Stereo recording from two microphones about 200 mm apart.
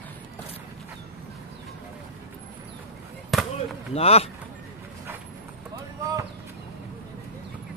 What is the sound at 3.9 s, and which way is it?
Speech, 30° left (ahead or behind).